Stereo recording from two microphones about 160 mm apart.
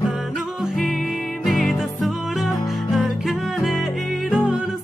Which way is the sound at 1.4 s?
Centre (ahead or behind).